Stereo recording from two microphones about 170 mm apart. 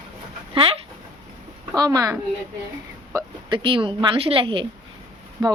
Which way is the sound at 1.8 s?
20° right (ahead or behind).